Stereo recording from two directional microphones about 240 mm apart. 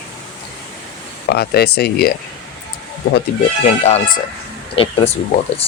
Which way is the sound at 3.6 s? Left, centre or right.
Left.